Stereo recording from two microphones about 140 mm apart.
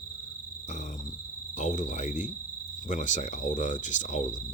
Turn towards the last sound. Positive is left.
turn(degrees=60)  # may be behind; listen again after turning